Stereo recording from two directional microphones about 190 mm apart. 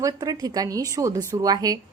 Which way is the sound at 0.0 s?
20° right (ahead or behind).